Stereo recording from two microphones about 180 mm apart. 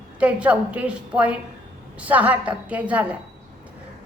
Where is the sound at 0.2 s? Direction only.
5° right (ahead or behind).